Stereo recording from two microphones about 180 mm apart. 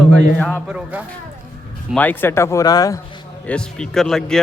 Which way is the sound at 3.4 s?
5° left (ahead or behind).